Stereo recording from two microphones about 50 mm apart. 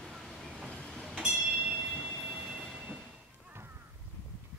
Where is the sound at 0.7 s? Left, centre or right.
Centre.